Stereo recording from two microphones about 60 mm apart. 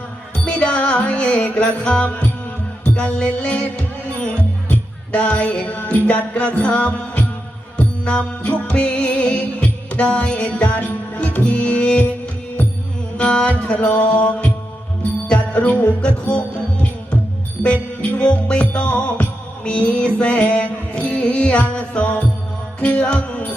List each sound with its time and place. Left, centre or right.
0.4 s music: left
13.1 s music: centre
18.1 s music: left